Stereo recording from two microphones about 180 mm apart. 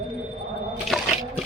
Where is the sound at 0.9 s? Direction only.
Centre (ahead or behind).